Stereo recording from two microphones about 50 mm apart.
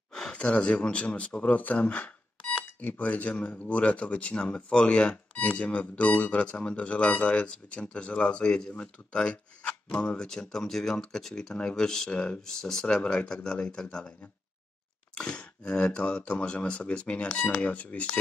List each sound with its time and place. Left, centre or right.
0.1 s gasp: centre
0.4 s speech: left
12.1 s speech: left
12.4 s speech: centre
15.1 s speech: centre